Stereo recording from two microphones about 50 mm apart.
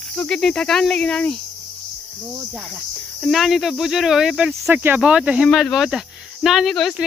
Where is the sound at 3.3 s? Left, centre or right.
Centre.